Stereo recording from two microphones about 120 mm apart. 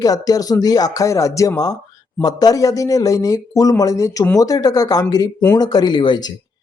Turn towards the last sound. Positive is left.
turn(degrees=40)  # may be behind; listen again after turning